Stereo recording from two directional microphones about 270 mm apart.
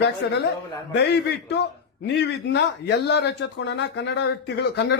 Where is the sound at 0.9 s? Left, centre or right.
Left.